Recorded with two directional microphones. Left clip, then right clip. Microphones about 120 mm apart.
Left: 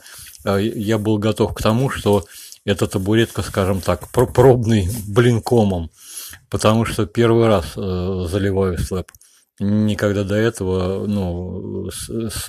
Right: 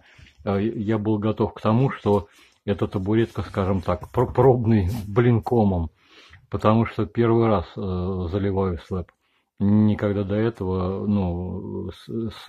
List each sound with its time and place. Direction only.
0.4 s speech: 20° left (ahead or behind)
5.6 s speech: 5° left (ahead or behind)
6.7 s speech: 25° left (ahead or behind)
11.1 s speech: 5° left (ahead or behind)
11.3 s speech: 20° left (ahead or behind)